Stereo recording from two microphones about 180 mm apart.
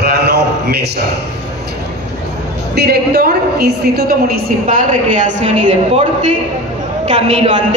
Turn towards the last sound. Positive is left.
turn(degrees=-40)  # may be behind; listen again after turning